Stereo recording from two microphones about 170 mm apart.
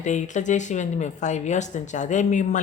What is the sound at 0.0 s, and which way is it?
Speech, 45° left (ahead or behind).